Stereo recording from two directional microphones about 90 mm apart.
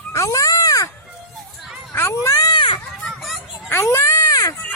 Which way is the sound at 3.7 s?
30° left (ahead or behind).